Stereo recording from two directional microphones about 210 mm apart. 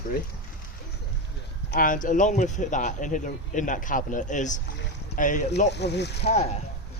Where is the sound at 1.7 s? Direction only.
40° left (ahead or behind).